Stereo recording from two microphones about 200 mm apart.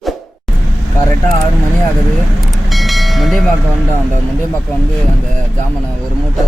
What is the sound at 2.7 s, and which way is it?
Train, centre (ahead or behind).